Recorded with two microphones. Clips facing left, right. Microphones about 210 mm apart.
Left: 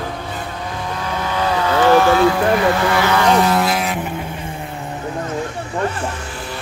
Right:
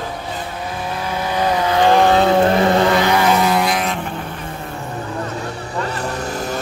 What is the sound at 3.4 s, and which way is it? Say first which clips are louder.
Vehicle: left 1 dB; centre (ahead or behind).